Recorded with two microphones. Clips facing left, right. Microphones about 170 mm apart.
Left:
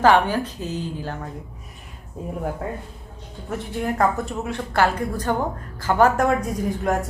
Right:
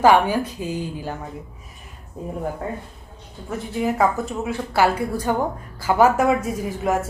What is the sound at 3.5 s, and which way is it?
Speech, centre (ahead or behind).